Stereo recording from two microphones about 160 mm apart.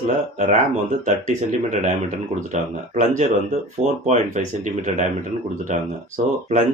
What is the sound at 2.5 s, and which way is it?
Speech, 50° right (ahead or behind).